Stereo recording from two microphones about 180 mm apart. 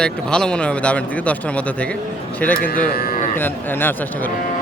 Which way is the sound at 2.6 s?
55° left (ahead or behind).